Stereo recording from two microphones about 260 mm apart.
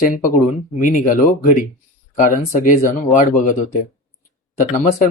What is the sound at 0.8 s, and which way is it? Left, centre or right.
Speech, left.